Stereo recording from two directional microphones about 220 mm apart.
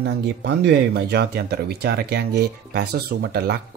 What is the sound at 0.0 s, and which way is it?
Speech, 50° right (ahead or behind).